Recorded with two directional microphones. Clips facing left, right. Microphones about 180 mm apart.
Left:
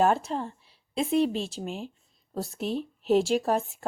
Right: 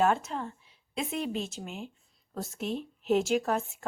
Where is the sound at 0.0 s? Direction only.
35° left (ahead or behind).